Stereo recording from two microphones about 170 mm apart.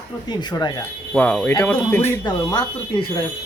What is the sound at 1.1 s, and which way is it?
Speech, 5° left (ahead or behind).